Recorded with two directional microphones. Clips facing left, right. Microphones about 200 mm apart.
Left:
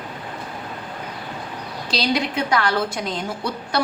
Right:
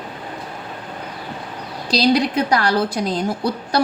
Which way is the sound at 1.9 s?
40° right (ahead or behind).